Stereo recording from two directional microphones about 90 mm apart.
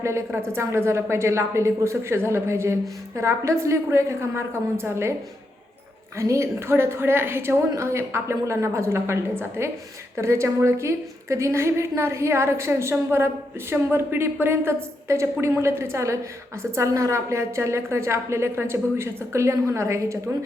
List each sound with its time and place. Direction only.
0.0 s a woman's voice: 30° right (ahead or behind)
6.1 s a woman's voice: 35° right (ahead or behind)